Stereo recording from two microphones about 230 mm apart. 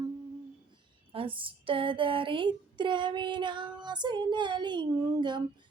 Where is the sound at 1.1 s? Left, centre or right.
Right.